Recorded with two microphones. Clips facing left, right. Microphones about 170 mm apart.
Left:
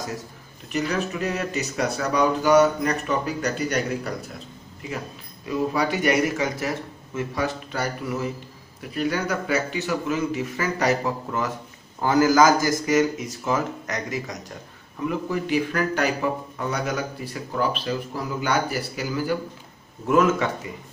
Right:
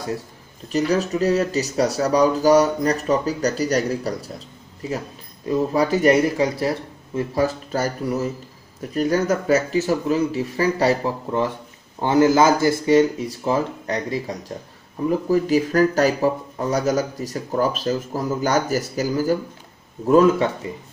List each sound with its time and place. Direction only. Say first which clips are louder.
0.7 s a man's voice: right 5 dB; 35° right (ahead or behind)